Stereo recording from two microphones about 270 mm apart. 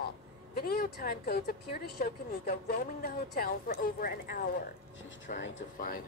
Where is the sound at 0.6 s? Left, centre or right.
Left.